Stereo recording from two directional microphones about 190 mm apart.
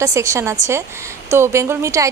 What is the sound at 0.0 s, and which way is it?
A woman's voice, 15° right (ahead or behind).